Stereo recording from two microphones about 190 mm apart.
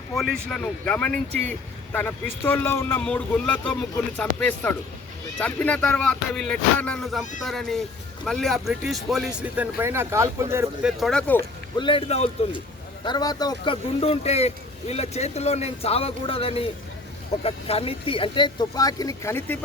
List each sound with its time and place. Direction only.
0.2 s a man's voice: centre (ahead or behind); by 10.7 s 15° right (ahead or behind)
10.8 s speech: centre (ahead or behind)
11.8 s speech: 30° left (ahead or behind)
13.1 s speech: 20° left (ahead or behind)